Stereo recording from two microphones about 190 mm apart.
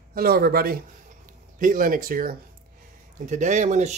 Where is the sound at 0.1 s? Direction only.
55° right (ahead or behind).